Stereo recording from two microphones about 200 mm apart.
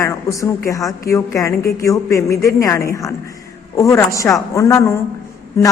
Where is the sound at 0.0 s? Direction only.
15° left (ahead or behind).